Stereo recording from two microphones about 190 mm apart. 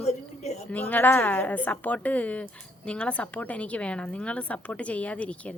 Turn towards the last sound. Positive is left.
turn(degrees=5)  # may be behind; listen again after turning